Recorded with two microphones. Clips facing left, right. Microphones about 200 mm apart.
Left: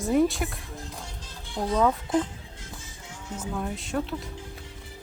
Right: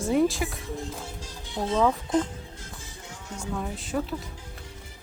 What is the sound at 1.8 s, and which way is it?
Speech, centre (ahead or behind).